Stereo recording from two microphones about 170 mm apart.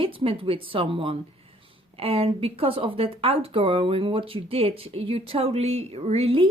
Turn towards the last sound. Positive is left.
turn(degrees=-35)  # may be behind; listen again after turning